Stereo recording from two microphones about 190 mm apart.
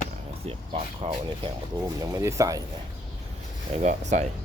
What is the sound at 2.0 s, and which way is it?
Speech, 15° right (ahead or behind).